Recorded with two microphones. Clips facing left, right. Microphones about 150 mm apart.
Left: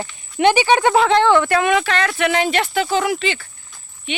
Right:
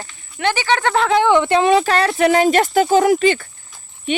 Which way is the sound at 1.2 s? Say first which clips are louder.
Right 1 dB; 15° right (ahead or behind).